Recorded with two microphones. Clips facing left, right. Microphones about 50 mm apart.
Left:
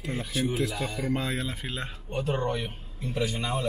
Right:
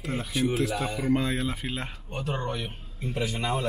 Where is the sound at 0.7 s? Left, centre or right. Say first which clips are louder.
Right 2 dB; right.